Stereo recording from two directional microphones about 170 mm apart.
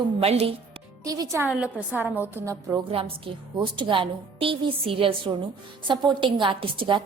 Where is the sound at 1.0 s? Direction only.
20° right (ahead or behind).